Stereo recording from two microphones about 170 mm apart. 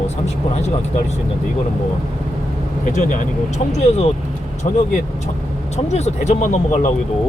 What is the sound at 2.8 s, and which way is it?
Speech, 50° left (ahead or behind).